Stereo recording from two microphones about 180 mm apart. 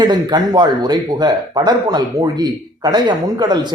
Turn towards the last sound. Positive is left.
turn(degrees=-25)  # may be behind; listen again after turning